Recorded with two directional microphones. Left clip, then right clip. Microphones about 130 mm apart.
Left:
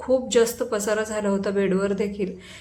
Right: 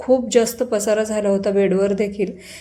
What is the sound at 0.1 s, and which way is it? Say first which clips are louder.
A woman's voice: right 4 dB; 30° right (ahead or behind).